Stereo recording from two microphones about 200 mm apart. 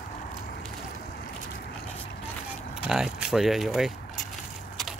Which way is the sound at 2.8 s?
5° right (ahead or behind).